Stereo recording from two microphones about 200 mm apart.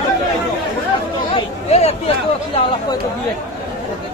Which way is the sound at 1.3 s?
30° left (ahead or behind).